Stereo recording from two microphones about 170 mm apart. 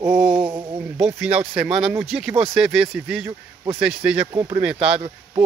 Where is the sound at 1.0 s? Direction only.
5° right (ahead or behind).